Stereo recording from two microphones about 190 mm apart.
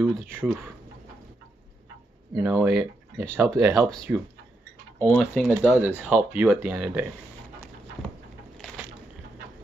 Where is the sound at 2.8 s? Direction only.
15° right (ahead or behind).